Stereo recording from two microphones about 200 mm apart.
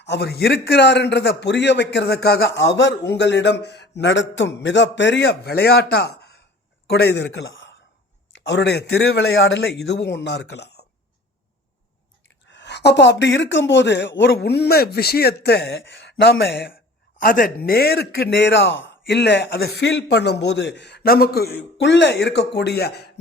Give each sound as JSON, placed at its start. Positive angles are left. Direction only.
{"t": 0.0, "sound": "a man's voice", "side_deg": 55}
{"t": 12.5, "sound": "a man's voice", "side_deg": 60}
{"t": 17.2, "sound": "a man's voice", "side_deg": 45}